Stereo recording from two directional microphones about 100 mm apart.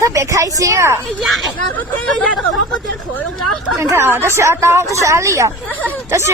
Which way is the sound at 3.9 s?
20° right (ahead or behind).